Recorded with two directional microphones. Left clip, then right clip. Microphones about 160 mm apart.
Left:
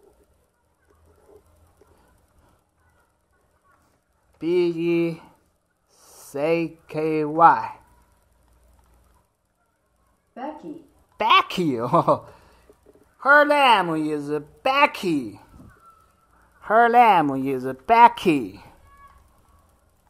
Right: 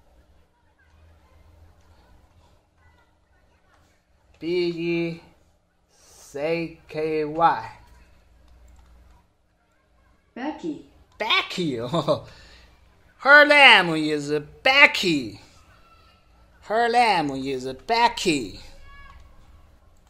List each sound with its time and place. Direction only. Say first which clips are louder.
4.4 s speech: left 3 dB; 65° left (ahead or behind)
6.3 s speech: left 3 dB; 60° left (ahead or behind)
11.1 s speech: left 5 dB; 45° left (ahead or behind)
13.2 s a woman's voice: right 3 dB; 15° left (ahead or behind)
16.6 s a woman's voice: left 5 dB; 30° left (ahead or behind)